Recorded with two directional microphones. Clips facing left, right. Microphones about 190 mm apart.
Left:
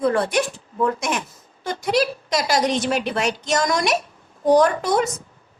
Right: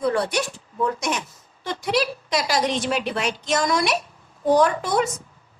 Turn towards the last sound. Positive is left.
turn(degrees=45)  # may be behind; listen again after turning